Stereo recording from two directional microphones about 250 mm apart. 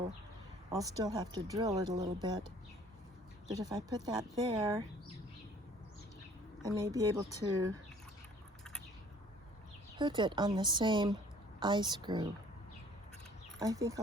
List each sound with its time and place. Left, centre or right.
0.8 s speech: centre
3.5 s speech: centre
6.6 s speech: centre
10.0 s speech: centre
13.6 s speech: centre